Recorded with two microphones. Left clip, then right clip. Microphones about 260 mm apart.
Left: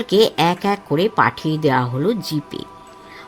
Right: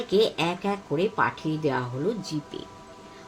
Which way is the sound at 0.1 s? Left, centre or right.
Left.